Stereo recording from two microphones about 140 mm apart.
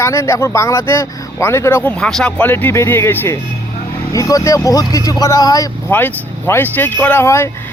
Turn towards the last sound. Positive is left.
turn(degrees=20)  # may be behind; listen again after turning